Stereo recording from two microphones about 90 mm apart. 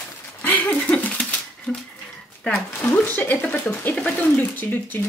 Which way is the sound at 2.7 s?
20° left (ahead or behind).